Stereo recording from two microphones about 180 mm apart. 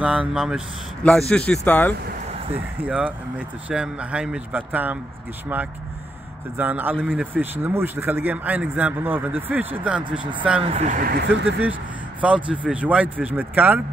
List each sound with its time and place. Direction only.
0.0 s speech: 5° right (ahead or behind); by 2.0 s 10° left (ahead or behind)
2.8 s a man's voice: 10° right (ahead or behind)
6.5 s a man's voice: 10° right (ahead or behind)
7.0 s speech: centre (ahead or behind)
7.3 s a man's voice: 10° right (ahead or behind)
10.6 s speech: 35° right (ahead or behind); by 11.6 s 65° right (ahead or behind)
12.2 s a man's voice: 5° right (ahead or behind)